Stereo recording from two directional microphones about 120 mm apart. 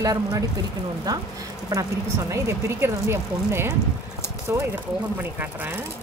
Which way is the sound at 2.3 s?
20° right (ahead or behind).